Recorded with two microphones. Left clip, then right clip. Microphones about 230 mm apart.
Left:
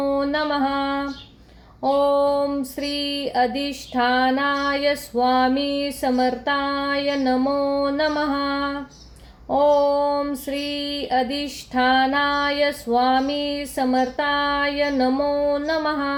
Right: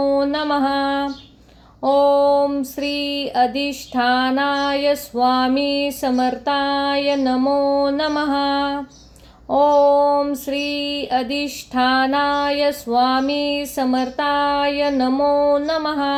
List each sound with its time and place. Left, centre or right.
0.0 s mantra: centre
1.8 s female singing: centre
3.0 s a sound: right
3.7 s female singing: centre